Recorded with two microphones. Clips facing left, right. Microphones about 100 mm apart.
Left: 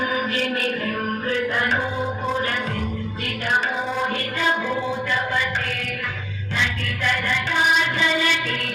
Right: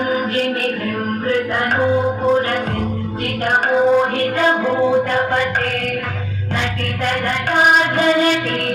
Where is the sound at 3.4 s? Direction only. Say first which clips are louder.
Right 9 dB; 50° right (ahead or behind).